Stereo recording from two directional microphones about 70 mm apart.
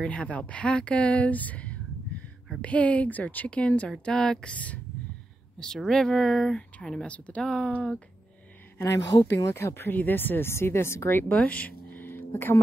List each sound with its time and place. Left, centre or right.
0.0 s a woman's voice: centre
5.8 s speech: centre
8.8 s a woman's voice: left
11.3 s a sound: centre